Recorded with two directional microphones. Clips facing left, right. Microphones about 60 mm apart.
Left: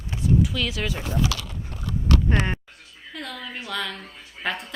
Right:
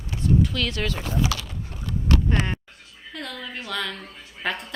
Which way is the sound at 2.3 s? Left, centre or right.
Left.